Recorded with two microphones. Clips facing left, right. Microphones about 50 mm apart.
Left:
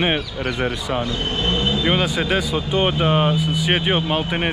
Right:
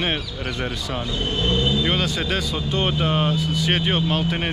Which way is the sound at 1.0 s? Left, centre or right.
Left.